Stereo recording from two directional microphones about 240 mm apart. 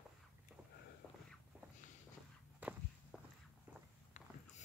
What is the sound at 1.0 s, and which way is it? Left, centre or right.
Walk, centre.